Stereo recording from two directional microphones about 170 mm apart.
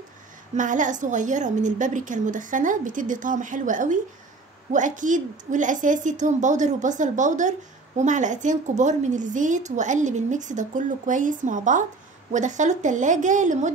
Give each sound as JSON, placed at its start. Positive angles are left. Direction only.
{"t": 0.6, "sound": "a woman's voice", "side_deg": -50}